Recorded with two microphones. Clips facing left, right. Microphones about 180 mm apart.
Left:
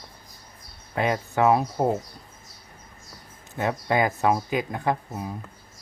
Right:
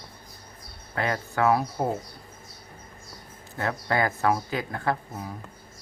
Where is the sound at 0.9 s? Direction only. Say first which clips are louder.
Left 3 dB; 20° left (ahead or behind).